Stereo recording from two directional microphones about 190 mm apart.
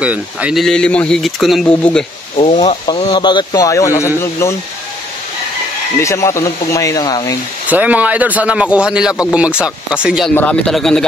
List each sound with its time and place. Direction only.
0.0 s speech: 5° right (ahead or behind)
2.3 s speech: 30° left (ahead or behind); by 4.6 s 15° left (ahead or behind)
5.9 s speech: 15° left (ahead or behind)
7.6 s speech: 10° right (ahead or behind)